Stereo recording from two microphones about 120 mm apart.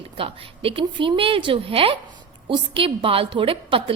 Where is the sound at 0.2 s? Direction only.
45° right (ahead or behind).